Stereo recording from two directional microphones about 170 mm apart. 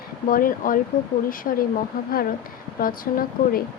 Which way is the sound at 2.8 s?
55° left (ahead or behind).